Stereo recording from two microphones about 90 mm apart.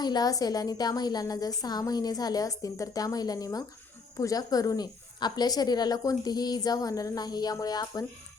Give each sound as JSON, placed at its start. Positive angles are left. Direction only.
{"t": 0.0, "sound": "a woman's voice", "side_deg": 50}